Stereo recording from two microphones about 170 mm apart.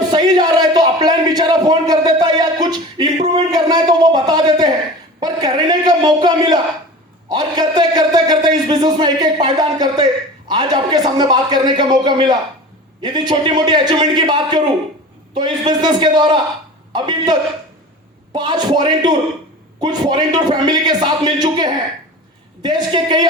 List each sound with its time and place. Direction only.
0.1 s a sound: 25° right (ahead or behind)
7.3 s a man's voice: 25° right (ahead or behind)
18.3 s a man's voice: 25° right (ahead or behind)